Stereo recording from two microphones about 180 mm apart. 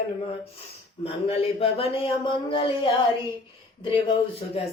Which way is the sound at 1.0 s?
35° left (ahead or behind).